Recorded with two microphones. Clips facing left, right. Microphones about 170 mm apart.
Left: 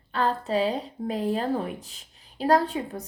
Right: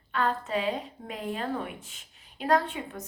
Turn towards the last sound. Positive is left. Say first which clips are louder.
# left 3 dB
turn(degrees=35)  # may be behind; listen again after turning